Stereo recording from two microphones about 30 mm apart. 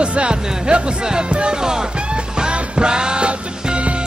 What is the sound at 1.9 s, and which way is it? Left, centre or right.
Music, right.